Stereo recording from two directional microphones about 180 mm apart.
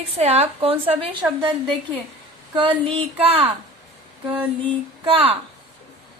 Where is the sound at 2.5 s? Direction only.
25° right (ahead or behind).